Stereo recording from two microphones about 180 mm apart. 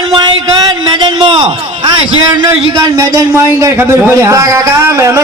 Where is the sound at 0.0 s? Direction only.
25° right (ahead or behind).